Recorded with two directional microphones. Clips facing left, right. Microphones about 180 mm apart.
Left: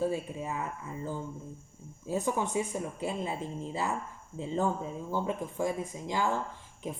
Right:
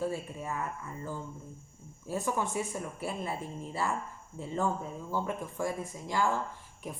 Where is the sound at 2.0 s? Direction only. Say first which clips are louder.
Left 2 dB; 15° left (ahead or behind).